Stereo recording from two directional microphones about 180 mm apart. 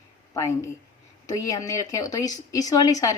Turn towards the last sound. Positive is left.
turn(degrees=20)  # may be behind; listen again after turning